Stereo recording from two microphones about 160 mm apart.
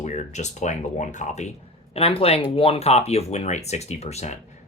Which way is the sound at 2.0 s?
35° left (ahead or behind).